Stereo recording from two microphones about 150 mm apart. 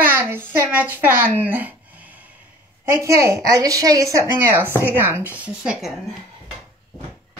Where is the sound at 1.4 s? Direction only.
10° right (ahead or behind).